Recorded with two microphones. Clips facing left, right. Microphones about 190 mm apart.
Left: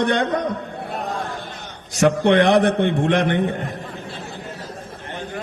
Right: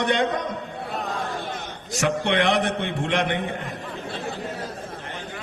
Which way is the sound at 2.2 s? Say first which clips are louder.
Left 8 dB; 50° left (ahead or behind).